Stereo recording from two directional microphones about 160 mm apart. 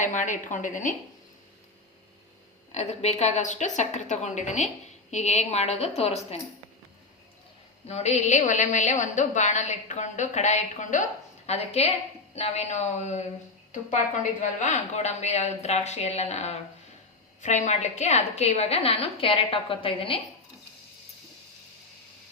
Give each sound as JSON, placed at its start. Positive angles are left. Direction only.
{"t": 0.0, "sound": "a woman's voice", "side_deg": 50}
{"t": 2.7, "sound": "a woman's voice", "side_deg": 45}
{"t": 7.9, "sound": "a woman's voice", "side_deg": 40}